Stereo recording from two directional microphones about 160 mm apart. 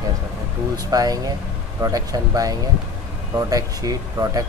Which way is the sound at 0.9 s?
20° right (ahead or behind).